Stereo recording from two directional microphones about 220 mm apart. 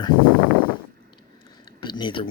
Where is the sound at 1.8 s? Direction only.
20° left (ahead or behind).